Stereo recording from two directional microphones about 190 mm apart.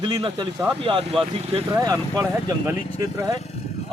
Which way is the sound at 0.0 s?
25° right (ahead or behind).